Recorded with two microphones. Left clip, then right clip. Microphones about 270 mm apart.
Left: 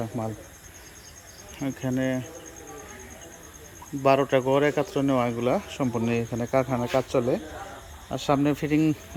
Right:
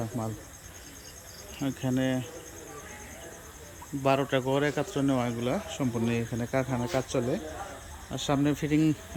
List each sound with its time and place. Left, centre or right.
0.1 s speech: centre
1.5 s insect: centre
4.0 s speech: centre